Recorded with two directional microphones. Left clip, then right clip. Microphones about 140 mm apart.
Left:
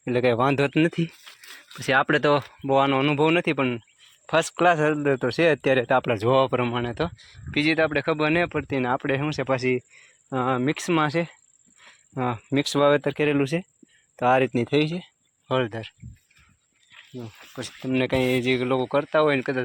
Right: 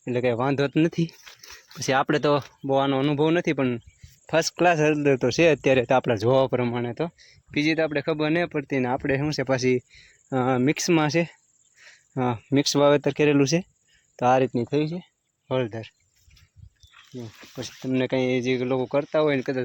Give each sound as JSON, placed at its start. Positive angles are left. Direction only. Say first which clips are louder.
{"t": 0.0, "sound": "speech", "louder": "left 3 dB", "side_deg": 10}
{"t": 1.8, "sound": "speech", "louder": "left 2 dB", "side_deg": -20}
{"t": 2.6, "sound": "speech", "louder": "left 2 dB", "side_deg": -5}
{"t": 5.0, "sound": "speech", "louder": "right 2 dB", "side_deg": -40}
{"t": 6.8, "sound": "speech", "louder": "left 1 dB", "side_deg": -5}
{"t": 12.1, "sound": "speech", "louder": "right 1 dB", "side_deg": -30}
{"t": 14.2, "sound": "speech", "louder": "even", "side_deg": -20}
{"t": 14.5, "sound": "speech", "louder": "left 2 dB", "side_deg": 5}
{"t": 17.2, "sound": "speech", "louder": "even", "side_deg": -10}